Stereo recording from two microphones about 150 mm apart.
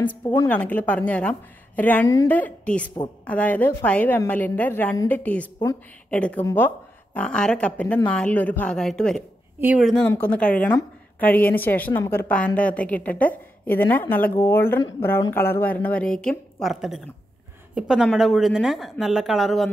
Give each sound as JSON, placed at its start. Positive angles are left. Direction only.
{"t": 0.2, "sound": "a woman's voice", "side_deg": 30}
{"t": 0.5, "sound": "a woman's voice", "side_deg": 10}
{"t": 9.6, "sound": "speech", "side_deg": -10}
{"t": 10.2, "sound": "a woman's voice", "side_deg": 10}